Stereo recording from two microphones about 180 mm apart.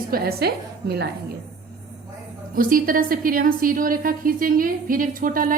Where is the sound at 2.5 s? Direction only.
50° right (ahead or behind).